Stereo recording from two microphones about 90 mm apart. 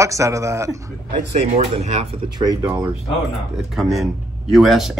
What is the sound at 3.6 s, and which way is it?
Speech, 5° right (ahead or behind).